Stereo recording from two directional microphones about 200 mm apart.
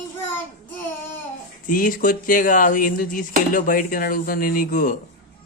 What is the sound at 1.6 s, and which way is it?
Speech, 45° left (ahead or behind).